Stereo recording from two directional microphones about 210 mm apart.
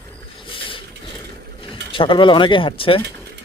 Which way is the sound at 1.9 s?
25° left (ahead or behind).